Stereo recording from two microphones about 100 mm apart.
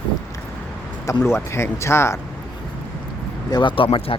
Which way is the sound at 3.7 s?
60° left (ahead or behind).